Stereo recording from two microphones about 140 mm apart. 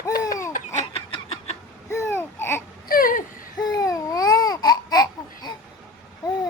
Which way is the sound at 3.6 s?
25° left (ahead or behind).